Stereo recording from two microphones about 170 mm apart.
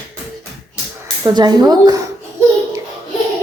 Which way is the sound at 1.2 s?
25° right (ahead or behind).